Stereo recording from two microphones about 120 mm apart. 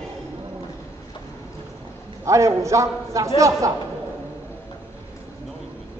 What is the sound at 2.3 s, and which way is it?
Speech, 25° right (ahead or behind).